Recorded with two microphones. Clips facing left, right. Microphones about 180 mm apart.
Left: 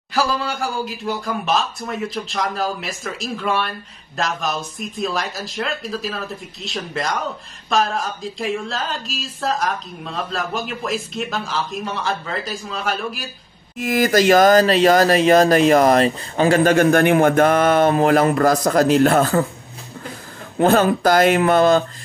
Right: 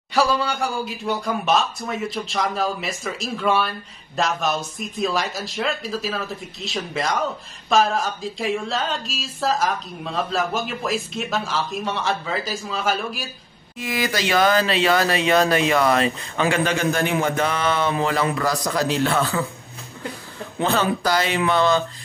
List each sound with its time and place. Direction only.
0.1 s speech: centre (ahead or behind)
13.7 s speech: 45° left (ahead or behind)
20.5 s speech: 50° left (ahead or behind)